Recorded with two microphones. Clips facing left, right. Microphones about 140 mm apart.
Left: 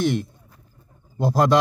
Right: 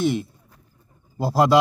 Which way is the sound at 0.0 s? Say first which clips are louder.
Even; 5° right (ahead or behind).